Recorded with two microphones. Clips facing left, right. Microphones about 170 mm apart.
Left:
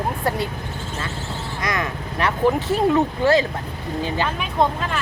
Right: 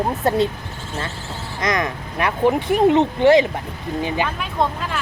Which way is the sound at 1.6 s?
20° right (ahead or behind).